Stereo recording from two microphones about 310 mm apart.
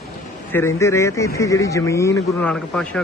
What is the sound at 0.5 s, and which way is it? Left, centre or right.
Speech, centre.